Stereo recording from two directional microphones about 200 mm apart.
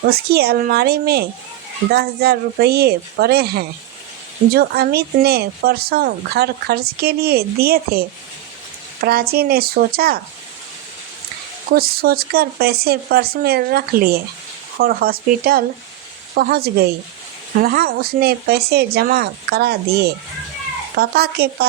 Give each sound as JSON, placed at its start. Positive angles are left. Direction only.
{"t": 0.0, "sound": "speech", "side_deg": -50}
{"t": 11.7, "sound": "speech", "side_deg": -50}